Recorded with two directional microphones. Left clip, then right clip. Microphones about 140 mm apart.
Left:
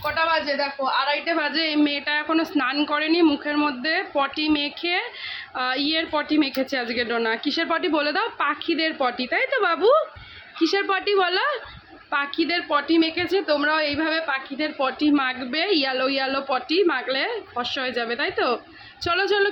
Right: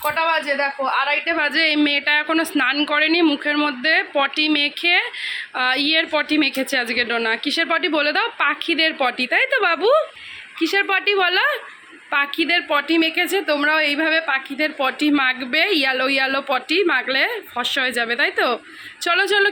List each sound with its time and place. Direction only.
0.0 s speech: 40° right (ahead or behind)
1.2 s a woman's voice: 15° right (ahead or behind)